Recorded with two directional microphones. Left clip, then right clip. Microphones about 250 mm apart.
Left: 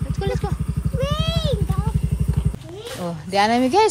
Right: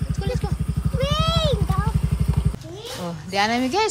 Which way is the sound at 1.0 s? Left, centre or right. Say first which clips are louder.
Right 3 dB; centre.